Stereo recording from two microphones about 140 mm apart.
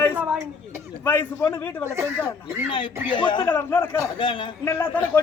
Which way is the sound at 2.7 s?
35° left (ahead or behind).